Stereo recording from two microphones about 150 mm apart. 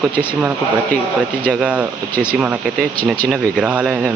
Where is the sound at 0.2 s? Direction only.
10° right (ahead or behind).